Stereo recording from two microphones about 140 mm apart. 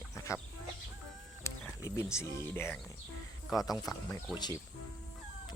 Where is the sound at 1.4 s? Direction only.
20° left (ahead or behind).